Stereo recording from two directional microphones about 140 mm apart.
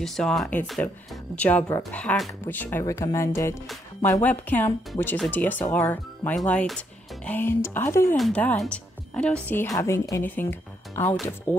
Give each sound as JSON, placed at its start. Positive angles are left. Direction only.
{"t": 0.0, "sound": "speech", "side_deg": 5}
{"t": 9.7, "sound": "speech", "side_deg": 20}